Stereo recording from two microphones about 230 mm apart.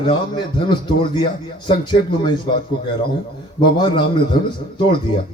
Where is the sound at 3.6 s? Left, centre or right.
Centre.